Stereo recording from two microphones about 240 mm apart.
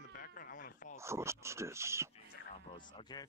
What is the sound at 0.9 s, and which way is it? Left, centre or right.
Speech, centre.